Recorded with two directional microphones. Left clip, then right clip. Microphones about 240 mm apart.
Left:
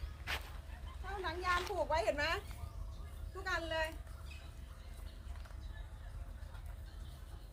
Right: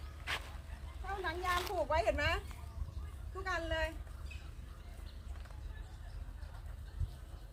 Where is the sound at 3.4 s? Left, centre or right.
Centre.